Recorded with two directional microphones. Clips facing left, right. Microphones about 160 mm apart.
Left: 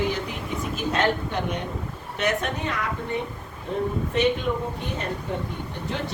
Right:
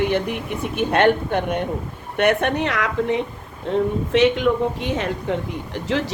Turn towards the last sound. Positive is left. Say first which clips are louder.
# right 7 dB
turn(degrees=-90)